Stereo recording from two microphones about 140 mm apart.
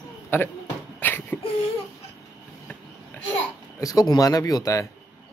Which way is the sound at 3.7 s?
25° left (ahead or behind).